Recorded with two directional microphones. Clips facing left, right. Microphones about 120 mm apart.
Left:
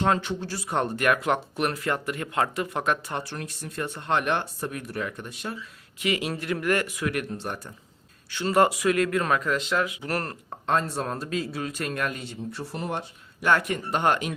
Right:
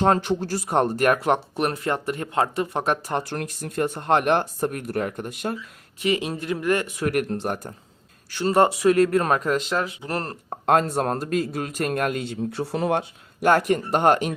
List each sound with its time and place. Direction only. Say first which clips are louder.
0.0 s speech: right 5 dB; 40° right (ahead or behind)
6.0 s speech: right 3 dB; 30° right (ahead or behind)
6.9 s speech: right 5 dB; 45° right (ahead or behind)
8.4 s speech: right 3 dB; 30° right (ahead or behind)
10.0 s speech: right 1 dB; 25° right (ahead or behind)
10.7 s a man's voice: right 6 dB; 60° right (ahead or behind); by 13.1 s 80° right
13.4 s speech: right 5 dB; 40° right (ahead or behind)